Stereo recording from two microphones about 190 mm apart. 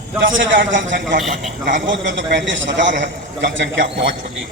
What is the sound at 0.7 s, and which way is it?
A man's voice, 70° right (ahead or behind).